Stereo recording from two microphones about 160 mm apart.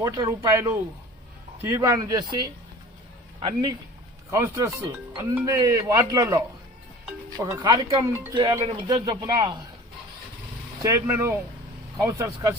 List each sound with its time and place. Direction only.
0.0 s speech: 20° right (ahead or behind)
10.8 s speech: 20° right (ahead or behind)